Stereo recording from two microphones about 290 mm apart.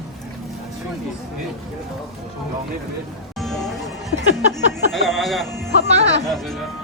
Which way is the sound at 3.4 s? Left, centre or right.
Centre.